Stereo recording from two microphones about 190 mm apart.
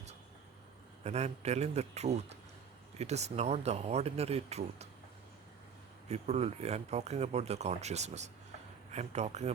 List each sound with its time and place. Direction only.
1.0 s speech: 35° right (ahead or behind)
6.1 s speech: 35° right (ahead or behind)